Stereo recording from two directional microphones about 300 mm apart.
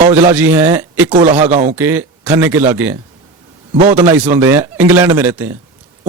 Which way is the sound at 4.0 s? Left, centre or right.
Centre.